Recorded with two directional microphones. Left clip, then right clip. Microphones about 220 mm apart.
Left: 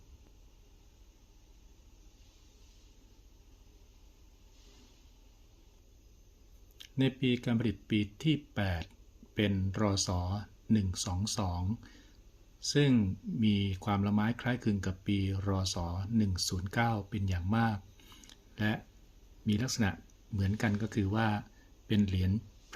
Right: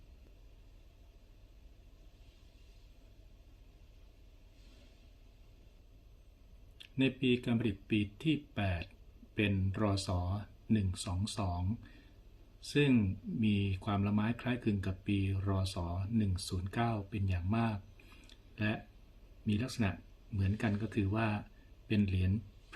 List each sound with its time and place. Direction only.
6.7 s speech: 25° left (ahead or behind)
12.6 s speech: 30° left (ahead or behind)
18.3 s a sound: 30° left (ahead or behind)
19.5 s speech: 30° left (ahead or behind)